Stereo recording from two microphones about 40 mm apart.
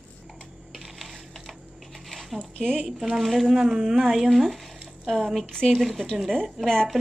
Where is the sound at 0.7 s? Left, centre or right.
Centre.